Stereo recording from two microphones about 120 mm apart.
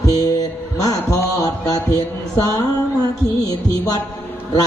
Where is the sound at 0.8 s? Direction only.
30° left (ahead or behind).